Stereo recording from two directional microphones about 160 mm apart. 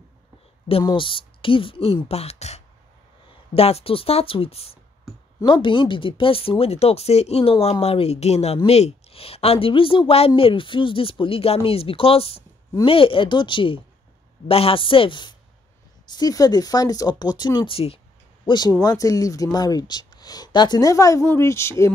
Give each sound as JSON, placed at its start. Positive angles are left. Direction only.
{"t": 0.8, "sound": "speech", "side_deg": 30}